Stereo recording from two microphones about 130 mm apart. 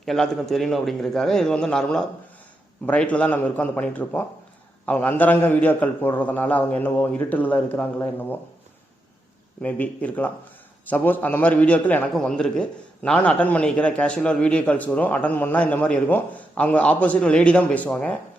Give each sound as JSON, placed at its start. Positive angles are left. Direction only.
{"t": 0.0, "sound": "a man's voice", "side_deg": 5}
{"t": 9.6, "sound": "a man's voice", "side_deg": 10}